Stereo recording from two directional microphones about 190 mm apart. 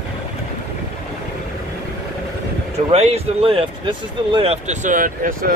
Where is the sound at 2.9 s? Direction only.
35° right (ahead or behind).